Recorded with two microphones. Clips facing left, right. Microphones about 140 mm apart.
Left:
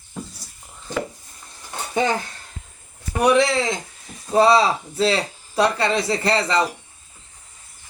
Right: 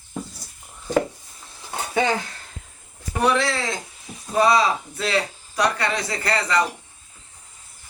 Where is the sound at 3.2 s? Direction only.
20° left (ahead or behind).